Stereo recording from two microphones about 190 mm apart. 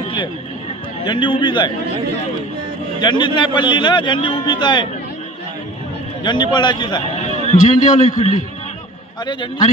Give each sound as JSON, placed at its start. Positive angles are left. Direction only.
{"t": 1.0, "sound": "a man's voice", "side_deg": 25}
{"t": 3.0, "sound": "a man's voice", "side_deg": 25}
{"t": 6.2, "sound": "a man's voice", "side_deg": 25}
{"t": 7.2, "sound": "a man's voice", "side_deg": 35}
{"t": 9.2, "sound": "a man's voice", "side_deg": 25}